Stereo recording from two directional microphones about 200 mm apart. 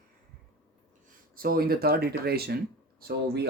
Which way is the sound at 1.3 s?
45° right (ahead or behind).